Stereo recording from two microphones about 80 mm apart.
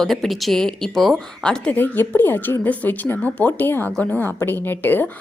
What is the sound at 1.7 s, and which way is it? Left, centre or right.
A woman's voice, left.